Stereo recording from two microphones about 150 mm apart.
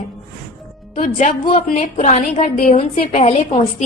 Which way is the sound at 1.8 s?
55° left (ahead or behind).